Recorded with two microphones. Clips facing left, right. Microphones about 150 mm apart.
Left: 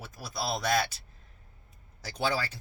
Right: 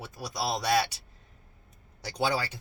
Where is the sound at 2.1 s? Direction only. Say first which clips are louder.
Right 2 dB; 15° right (ahead or behind).